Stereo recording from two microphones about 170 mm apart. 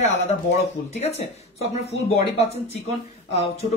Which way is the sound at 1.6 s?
40° left (ahead or behind).